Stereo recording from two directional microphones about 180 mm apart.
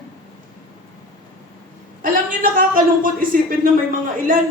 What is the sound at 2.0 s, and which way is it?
A woman's voice, 50° right (ahead or behind).